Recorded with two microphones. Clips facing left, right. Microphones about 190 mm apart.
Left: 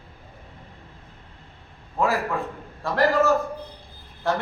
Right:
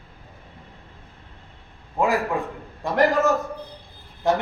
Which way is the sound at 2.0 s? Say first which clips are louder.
Right 2 dB; 15° right (ahead or behind).